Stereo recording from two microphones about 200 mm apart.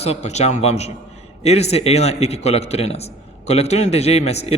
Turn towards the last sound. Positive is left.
turn(degrees=30)  # may be behind; listen again after turning